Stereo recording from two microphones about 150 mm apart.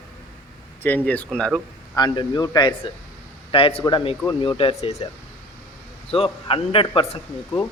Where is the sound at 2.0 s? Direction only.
30° left (ahead or behind); by 5.0 s 45° left (ahead or behind).